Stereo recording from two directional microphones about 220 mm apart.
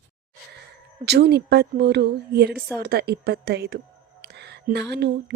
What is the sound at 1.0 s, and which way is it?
A woman's voice, 50° right (ahead or behind).